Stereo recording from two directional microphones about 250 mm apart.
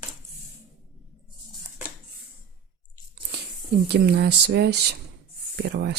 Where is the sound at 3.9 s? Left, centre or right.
Right.